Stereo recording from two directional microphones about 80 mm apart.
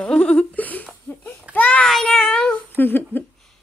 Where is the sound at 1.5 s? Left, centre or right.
Centre.